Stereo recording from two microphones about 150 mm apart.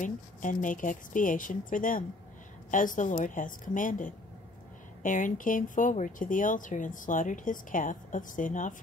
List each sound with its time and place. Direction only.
0.0 s speech: 60° left (ahead or behind)